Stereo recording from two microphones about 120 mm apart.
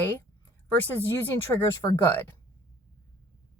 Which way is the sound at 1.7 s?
25° left (ahead or behind).